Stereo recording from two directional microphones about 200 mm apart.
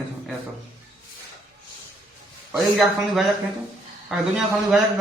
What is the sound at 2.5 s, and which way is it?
Speech, centre (ahead or behind).